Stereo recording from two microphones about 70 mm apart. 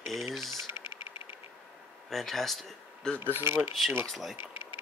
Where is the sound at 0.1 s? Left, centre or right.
Centre.